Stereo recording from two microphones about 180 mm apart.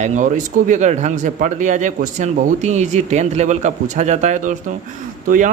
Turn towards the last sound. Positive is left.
turn(degrees=-50)  # may be behind; listen again after turning